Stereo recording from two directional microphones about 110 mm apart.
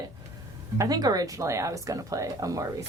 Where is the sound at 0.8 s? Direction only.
35° right (ahead or behind).